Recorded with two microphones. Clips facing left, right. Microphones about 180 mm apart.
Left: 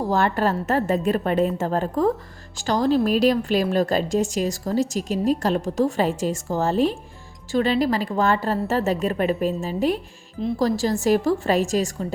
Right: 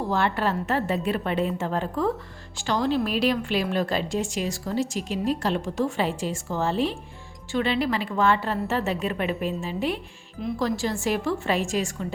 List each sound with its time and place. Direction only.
0.1 s speech: 40° left (ahead or behind)